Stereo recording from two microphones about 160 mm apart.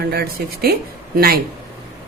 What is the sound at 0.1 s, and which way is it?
A woman's voice, 75° right (ahead or behind).